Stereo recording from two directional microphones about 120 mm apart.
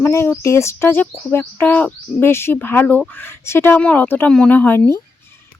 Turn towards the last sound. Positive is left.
turn(degrees=15)  # may be behind; listen again after turning